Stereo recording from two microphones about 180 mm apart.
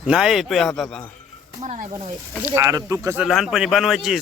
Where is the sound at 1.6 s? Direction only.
45° right (ahead or behind).